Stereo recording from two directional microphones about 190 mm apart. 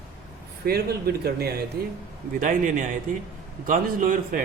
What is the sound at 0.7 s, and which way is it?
Speech, 55° right (ahead or behind).